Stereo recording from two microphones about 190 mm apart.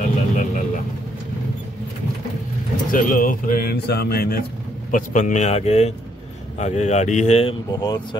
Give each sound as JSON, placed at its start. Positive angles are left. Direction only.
{"t": 0.0, "sound": "a sound", "side_deg": 40}
{"t": 2.9, "sound": "speech", "side_deg": 45}
{"t": 4.9, "sound": "a man's voice", "side_deg": 40}
{"t": 7.7, "sound": "speech", "side_deg": 20}